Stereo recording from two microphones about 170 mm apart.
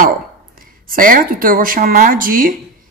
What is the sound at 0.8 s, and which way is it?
Speech, 55° right (ahead or behind).